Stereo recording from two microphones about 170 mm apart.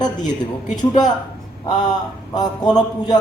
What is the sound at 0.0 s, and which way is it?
Speech, 25° left (ahead or behind).